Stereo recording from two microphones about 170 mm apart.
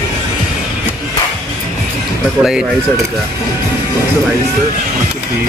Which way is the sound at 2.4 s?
5° right (ahead or behind).